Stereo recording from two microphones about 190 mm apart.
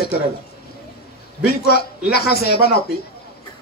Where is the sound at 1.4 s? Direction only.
55° left (ahead or behind).